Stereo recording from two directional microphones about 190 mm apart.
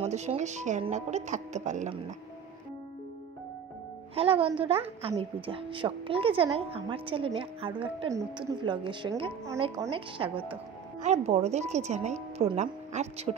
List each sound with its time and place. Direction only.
0.0 s speech: 35° right (ahead or behind)
4.1 s a woman's voice: 30° right (ahead or behind)